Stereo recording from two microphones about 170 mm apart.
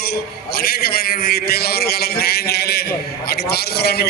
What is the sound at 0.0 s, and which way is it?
A man's voice, 65° left (ahead or behind).